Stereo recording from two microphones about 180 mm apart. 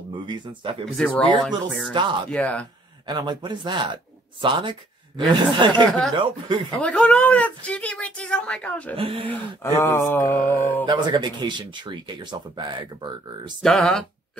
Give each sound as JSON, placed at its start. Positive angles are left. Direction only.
{"t": 0.3, "sound": "speech", "side_deg": -30}
{"t": 0.9, "sound": "speech", "side_deg": 5}
{"t": 1.9, "sound": "speech", "side_deg": -25}
{"t": 2.3, "sound": "speech", "side_deg": 5}
{"t": 3.1, "sound": "speech", "side_deg": -25}
{"t": 5.9, "sound": "speech", "side_deg": 0}
{"t": 6.1, "sound": "speech", "side_deg": -30}
{"t": 6.8, "sound": "speech", "side_deg": 5}
{"t": 8.9, "sound": "speech", "side_deg": -30}
{"t": 9.3, "sound": "speech", "side_deg": 15}
{"t": 10.9, "sound": "speech", "side_deg": -25}
{"t": 13.6, "sound": "speech", "side_deg": 0}